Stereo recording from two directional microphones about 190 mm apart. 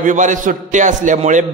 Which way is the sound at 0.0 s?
40° right (ahead or behind).